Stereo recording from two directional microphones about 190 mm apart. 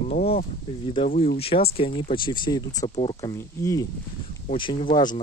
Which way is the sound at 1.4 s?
30° left (ahead or behind).